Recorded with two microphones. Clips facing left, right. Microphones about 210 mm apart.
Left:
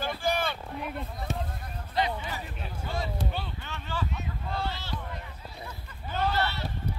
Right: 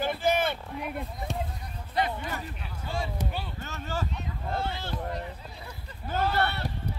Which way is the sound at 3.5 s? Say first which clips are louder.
Right 2 dB; 45° right (ahead or behind).